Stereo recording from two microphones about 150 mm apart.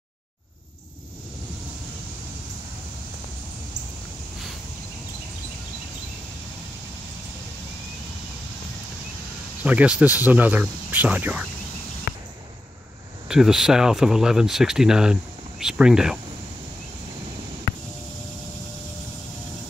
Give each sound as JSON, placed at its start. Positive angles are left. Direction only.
{"t": 9.6, "sound": "speech", "side_deg": -10}
{"t": 12.1, "sound": "basketball bounce", "side_deg": 90}
{"t": 13.3, "sound": "speech", "side_deg": -5}
{"t": 17.7, "sound": "a sound", "side_deg": 90}